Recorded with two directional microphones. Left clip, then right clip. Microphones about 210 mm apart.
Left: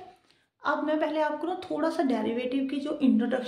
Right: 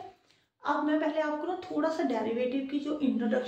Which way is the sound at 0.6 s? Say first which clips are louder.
Left 2 dB; 55° left (ahead or behind).